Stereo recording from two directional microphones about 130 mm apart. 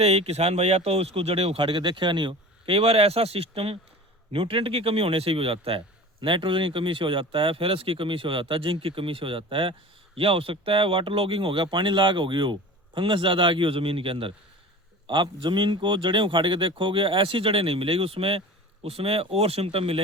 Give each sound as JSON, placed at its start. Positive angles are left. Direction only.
{"t": 0.0, "sound": "speech", "side_deg": -55}